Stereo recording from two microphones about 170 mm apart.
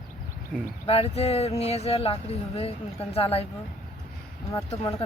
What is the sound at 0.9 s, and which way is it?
Speech, 35° left (ahead or behind).